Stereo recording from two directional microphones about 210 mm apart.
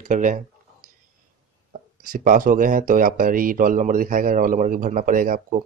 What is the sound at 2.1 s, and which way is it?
Speech, 40° right (ahead or behind).